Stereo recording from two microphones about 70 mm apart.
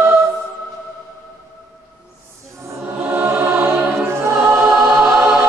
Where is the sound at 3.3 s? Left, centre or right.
Right.